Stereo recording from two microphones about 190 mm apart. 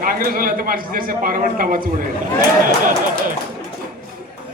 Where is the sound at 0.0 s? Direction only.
50° right (ahead or behind).